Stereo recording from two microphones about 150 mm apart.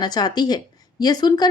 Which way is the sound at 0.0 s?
25° left (ahead or behind).